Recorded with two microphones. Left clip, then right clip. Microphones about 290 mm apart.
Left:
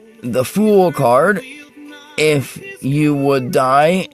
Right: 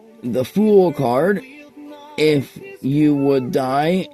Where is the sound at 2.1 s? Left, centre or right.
Left.